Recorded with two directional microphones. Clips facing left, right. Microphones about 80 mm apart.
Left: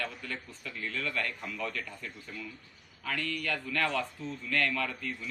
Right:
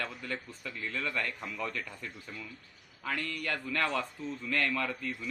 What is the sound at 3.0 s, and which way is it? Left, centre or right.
A man's voice, right.